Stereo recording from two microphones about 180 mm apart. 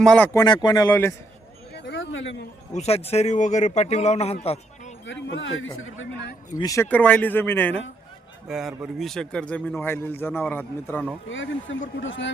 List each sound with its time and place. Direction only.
0.0 s speech: 5° left (ahead or behind)
0.3 s speech: 25° left (ahead or behind)
1.7 s a sound: 75° left (ahead or behind)
2.7 s a man's voice: 35° left (ahead or behind)
5.0 s a man's voice: 90° left
6.6 s a man's voice: 15° left (ahead or behind)
8.4 s a man's voice: centre (ahead or behind)
11.3 s a man's voice: 85° left